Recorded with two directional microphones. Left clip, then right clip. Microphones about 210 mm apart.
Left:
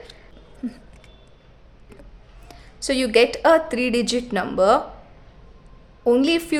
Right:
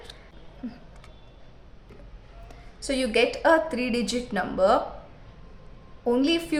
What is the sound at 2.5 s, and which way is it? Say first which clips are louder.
Speech: left 6 dB; 50° left (ahead or behind).